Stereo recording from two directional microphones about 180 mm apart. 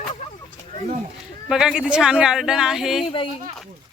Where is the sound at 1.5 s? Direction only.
5° right (ahead or behind).